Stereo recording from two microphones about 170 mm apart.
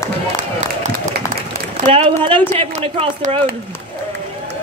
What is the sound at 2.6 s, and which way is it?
Speech, 40° right (ahead or behind).